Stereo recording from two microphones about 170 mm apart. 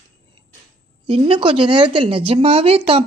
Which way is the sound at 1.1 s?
35° right (ahead or behind).